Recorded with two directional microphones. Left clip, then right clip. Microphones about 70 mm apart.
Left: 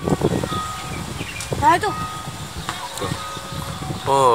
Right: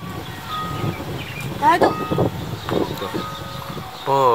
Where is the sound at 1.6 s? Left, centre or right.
Left.